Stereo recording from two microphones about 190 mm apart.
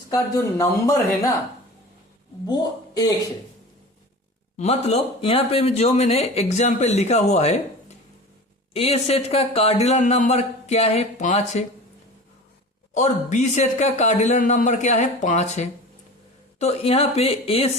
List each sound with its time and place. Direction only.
0.1 s speech: 15° left (ahead or behind)
2.5 s a woman's voice: 20° left (ahead or behind)
4.5 s speech: 35° left (ahead or behind)
8.7 s speech: 30° left (ahead or behind)
12.9 s speech: 40° left (ahead or behind)